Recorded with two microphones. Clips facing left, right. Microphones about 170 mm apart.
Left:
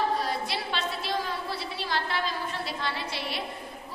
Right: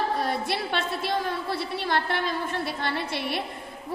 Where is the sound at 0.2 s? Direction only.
55° right (ahead or behind).